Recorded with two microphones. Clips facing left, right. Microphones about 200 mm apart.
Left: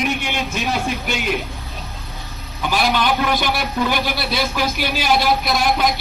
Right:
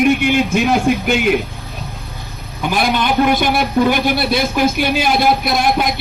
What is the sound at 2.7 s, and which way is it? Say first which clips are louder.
A man's voice: right 2 dB; 50° right (ahead or behind).